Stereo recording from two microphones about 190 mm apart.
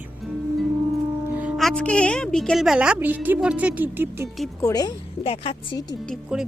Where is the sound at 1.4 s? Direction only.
5° right (ahead or behind).